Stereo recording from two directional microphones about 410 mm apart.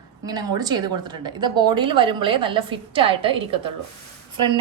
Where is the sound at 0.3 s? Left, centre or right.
Centre.